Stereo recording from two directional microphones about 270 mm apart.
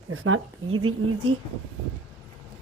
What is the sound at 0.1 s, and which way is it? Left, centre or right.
Speech, right.